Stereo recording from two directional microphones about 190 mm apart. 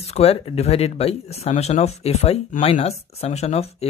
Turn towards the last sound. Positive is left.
turn(degrees=35)  # may be behind; listen again after turning